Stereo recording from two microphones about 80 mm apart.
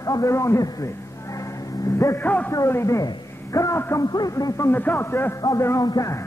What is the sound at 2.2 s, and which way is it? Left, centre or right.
Speech, left.